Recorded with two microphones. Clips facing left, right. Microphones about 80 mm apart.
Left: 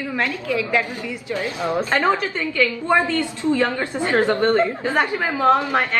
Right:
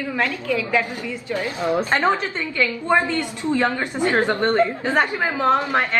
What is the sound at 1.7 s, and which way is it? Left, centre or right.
A woman's voice, right.